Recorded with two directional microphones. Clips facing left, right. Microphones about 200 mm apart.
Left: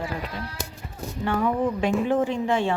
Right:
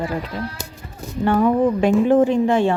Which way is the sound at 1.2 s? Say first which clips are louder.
Right 7 dB; 45° right (ahead or behind).